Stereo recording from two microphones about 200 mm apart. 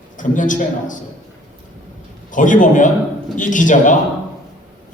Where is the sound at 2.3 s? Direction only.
40° left (ahead or behind).